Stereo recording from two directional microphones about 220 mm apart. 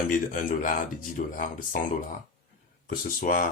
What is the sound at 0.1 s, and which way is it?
Speech, 40° left (ahead or behind).